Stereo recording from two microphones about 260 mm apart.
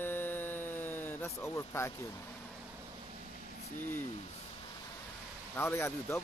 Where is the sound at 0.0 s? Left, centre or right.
Centre.